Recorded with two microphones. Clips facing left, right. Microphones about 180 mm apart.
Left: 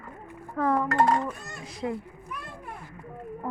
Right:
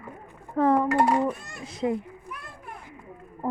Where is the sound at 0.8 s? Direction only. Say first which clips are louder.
Right 2 dB; 10° right (ahead or behind).